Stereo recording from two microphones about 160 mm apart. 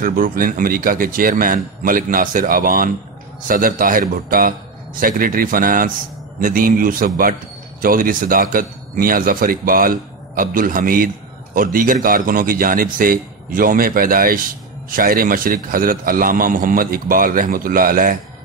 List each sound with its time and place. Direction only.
0.0 s speech: 60° right (ahead or behind)